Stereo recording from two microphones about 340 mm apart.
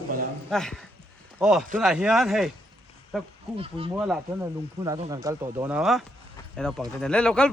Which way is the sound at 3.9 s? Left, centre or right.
Centre.